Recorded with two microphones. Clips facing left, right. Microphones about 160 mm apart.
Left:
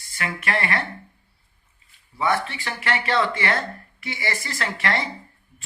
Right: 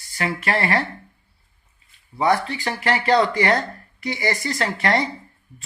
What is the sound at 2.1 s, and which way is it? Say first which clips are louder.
Speech: right 4 dB; 30° right (ahead or behind).